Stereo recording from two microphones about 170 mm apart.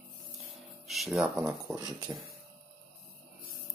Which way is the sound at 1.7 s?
20° right (ahead or behind).